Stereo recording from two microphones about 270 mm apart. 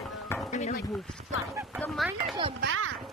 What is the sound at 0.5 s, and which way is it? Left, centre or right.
Speech, left.